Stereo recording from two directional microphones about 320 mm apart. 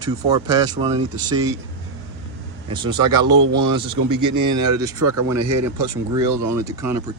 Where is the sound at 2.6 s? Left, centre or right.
Centre.